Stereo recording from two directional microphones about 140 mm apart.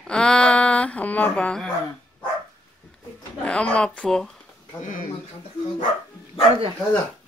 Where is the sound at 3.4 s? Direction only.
10° left (ahead or behind).